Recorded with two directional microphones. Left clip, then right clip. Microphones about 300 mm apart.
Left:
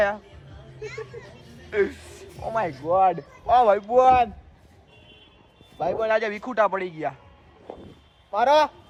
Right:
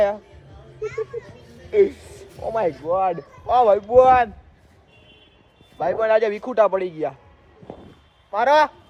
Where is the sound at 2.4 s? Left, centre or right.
Centre.